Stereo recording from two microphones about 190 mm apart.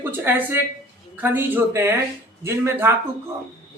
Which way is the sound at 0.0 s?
10° right (ahead or behind).